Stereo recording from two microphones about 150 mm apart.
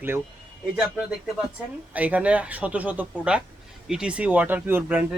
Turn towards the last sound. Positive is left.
turn(degrees=-10)  # may be behind; listen again after turning